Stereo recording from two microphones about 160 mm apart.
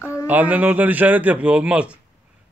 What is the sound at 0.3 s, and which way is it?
A man's voice, 10° right (ahead or behind).